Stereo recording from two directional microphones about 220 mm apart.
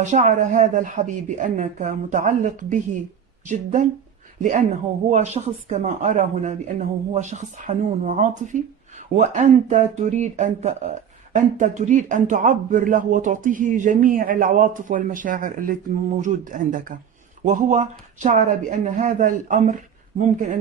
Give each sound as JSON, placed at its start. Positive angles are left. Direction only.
{"t": 0.0, "sound": "speech", "side_deg": -35}